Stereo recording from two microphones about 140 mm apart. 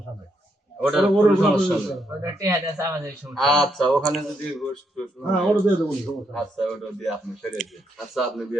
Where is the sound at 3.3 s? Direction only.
Centre (ahead or behind).